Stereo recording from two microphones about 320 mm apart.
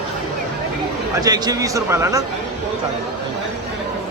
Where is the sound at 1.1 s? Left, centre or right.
Centre.